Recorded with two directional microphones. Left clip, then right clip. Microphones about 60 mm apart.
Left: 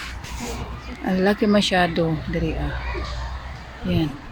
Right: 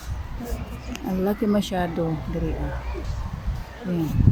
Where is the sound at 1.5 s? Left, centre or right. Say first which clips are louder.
Left 6 dB; left.